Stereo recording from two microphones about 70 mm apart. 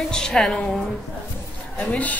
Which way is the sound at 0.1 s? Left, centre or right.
Centre.